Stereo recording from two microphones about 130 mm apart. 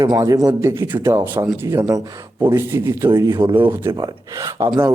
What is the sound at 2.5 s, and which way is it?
Speech, 20° right (ahead or behind).